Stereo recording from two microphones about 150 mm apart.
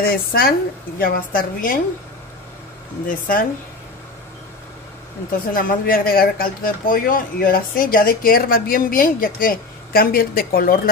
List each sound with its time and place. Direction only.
0.0 s speech: 80° left
3.1 s speech: 70° left (ahead or behind)
5.5 s speech: 70° left (ahead or behind)